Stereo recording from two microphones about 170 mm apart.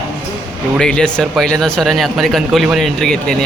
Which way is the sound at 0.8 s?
5° left (ahead or behind).